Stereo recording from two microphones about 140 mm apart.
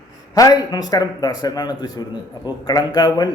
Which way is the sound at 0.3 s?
25° left (ahead or behind).